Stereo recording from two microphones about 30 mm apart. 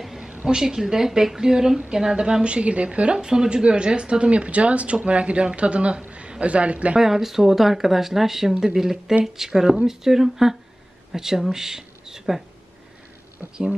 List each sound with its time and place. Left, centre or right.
0.5 s a woman's voice: right
2.4 s speech: right
3.2 s a man's voice: right
7.0 s speech: centre
13.4 s a sound: right